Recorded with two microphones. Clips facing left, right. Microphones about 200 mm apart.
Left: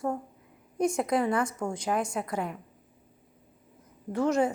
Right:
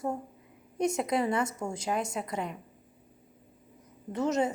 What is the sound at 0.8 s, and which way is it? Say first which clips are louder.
A woman's voice: left 2 dB; 25° right (ahead or behind).